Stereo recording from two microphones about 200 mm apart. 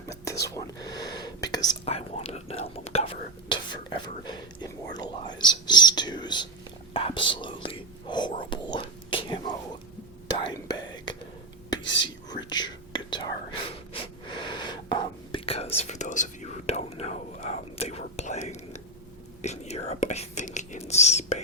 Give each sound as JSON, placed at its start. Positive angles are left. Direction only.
{"t": 0.1, "sound": "whispering", "side_deg": 15}
{"t": 1.8, "sound": "whispering", "side_deg": 30}
{"t": 3.5, "sound": "speech", "side_deg": 20}
{"t": 10.2, "sound": "whispering", "side_deg": 20}
{"t": 11.8, "sound": "whispering", "side_deg": 65}
{"t": 12.0, "sound": "whispering", "side_deg": 20}